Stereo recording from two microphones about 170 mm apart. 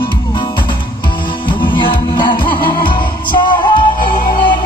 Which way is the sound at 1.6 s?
30° left (ahead or behind).